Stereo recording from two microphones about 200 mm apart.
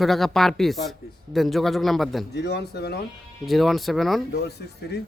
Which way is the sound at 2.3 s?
55° left (ahead or behind).